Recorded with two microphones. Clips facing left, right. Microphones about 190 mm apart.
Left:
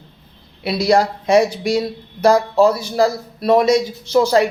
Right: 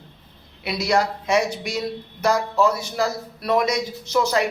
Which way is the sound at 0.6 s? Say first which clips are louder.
Left 6 dB; 35° left (ahead or behind).